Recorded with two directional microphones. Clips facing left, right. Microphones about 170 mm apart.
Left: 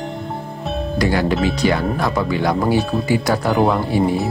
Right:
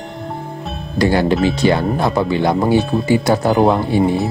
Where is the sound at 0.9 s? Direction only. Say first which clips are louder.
Right 4 dB; 30° right (ahead or behind).